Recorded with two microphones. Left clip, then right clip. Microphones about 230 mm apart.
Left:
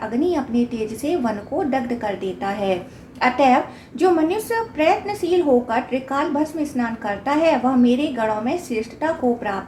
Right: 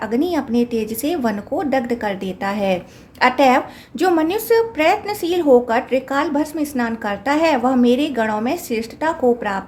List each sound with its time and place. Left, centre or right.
0.0 s a woman's voice: right